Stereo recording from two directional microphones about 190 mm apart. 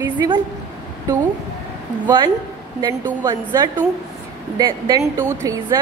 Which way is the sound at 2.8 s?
20° right (ahead or behind).